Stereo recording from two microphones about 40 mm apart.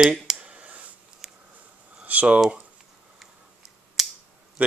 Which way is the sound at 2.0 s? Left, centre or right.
Right.